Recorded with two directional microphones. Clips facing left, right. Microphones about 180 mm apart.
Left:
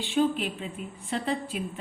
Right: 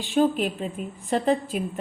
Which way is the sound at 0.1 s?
45° right (ahead or behind).